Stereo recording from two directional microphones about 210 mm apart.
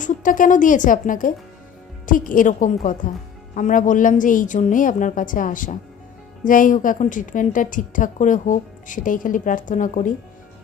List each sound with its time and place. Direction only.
0.0 s a woman's voice: 40° left (ahead or behind)